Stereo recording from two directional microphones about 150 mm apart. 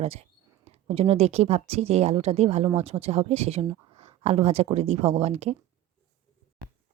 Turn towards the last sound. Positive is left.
turn(degrees=-45)  # may be behind; listen again after turning